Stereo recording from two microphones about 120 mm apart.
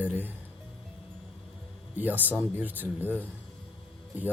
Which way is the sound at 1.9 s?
15° right (ahead or behind).